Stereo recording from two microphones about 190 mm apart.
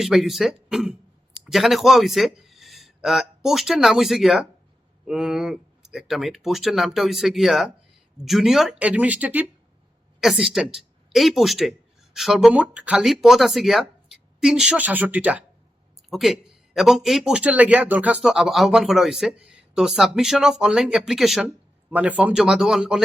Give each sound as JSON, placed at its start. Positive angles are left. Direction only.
{"t": 0.0, "sound": "a man's voice", "side_deg": 0}